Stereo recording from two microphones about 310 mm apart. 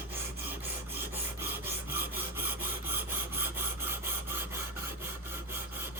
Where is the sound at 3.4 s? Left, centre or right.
Centre.